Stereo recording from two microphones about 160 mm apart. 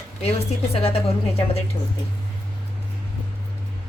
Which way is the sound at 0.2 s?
40° left (ahead or behind).